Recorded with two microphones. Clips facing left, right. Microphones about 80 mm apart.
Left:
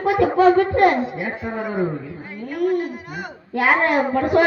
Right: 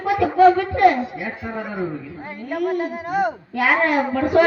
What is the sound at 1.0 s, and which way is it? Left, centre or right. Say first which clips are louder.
Speech: left 2 dB; left.